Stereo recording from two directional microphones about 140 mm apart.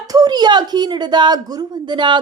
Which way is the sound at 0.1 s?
30° right (ahead or behind).